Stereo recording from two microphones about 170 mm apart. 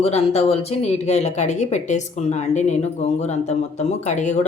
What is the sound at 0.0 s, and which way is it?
Speech, 35° left (ahead or behind).